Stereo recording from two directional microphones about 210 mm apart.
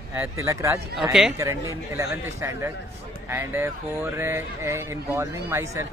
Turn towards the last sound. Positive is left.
turn(degrees=-10)  # may be behind; listen again after turning